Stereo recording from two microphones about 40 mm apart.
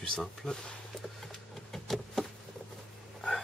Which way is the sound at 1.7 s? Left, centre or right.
Centre.